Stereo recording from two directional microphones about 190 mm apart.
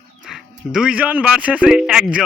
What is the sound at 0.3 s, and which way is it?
Speech, 5° right (ahead or behind).